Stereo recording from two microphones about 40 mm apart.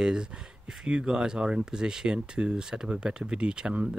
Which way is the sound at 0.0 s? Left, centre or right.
Centre.